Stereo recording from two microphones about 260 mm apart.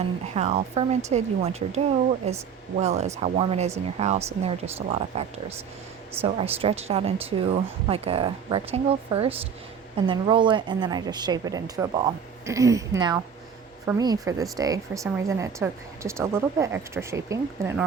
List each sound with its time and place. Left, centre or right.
0.3 s speech: right